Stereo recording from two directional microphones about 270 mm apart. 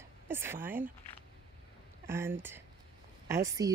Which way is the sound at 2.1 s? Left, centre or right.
Centre.